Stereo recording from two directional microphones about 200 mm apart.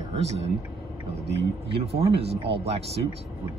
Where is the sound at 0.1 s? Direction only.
30° right (ahead or behind).